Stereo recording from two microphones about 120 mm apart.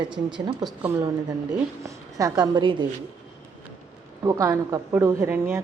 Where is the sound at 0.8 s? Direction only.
15° right (ahead or behind).